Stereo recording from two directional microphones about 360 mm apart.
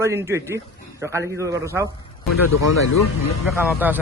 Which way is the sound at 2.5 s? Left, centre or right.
Left.